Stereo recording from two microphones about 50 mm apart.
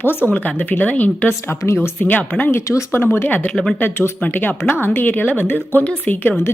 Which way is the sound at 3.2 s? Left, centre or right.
Left.